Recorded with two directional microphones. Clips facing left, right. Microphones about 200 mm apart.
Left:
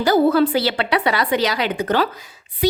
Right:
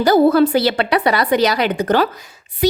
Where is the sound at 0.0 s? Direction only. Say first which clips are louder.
Right 3 dB; 45° right (ahead or behind).